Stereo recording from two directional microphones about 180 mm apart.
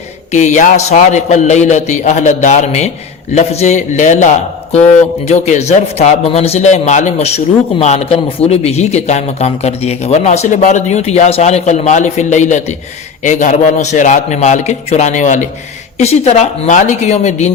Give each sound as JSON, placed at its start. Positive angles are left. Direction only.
{"t": 0.3, "sound": "a man's voice", "side_deg": 40}